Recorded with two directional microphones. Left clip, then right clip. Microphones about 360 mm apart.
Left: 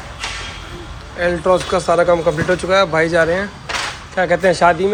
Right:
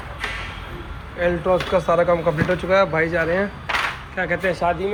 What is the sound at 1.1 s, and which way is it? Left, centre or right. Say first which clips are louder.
Speech: left 4 dB; centre.